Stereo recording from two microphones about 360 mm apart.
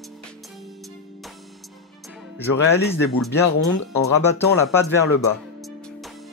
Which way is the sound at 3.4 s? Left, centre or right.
Left.